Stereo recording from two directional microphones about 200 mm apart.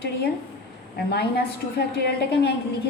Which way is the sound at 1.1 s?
55° left (ahead or behind).